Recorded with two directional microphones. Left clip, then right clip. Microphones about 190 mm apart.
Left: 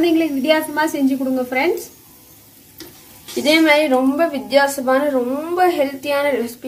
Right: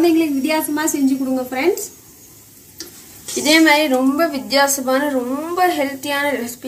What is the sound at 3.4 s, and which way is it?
A woman's voice, centre (ahead or behind).